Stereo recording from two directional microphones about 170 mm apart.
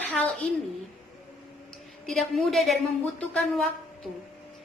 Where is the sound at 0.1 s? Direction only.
10° left (ahead or behind).